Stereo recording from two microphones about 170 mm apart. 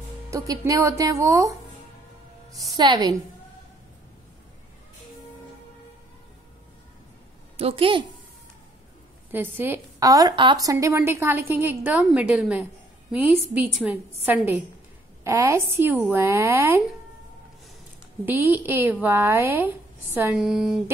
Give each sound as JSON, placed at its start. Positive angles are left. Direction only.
{"t": 0.3, "sound": "speech", "side_deg": -20}
{"t": 7.5, "sound": "a woman's voice", "side_deg": -35}
{"t": 9.3, "sound": "a woman's voice", "side_deg": -10}
{"t": 18.2, "sound": "a woman's voice", "side_deg": -10}